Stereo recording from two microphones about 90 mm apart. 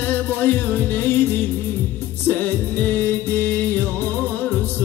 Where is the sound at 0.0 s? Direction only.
20° left (ahead or behind).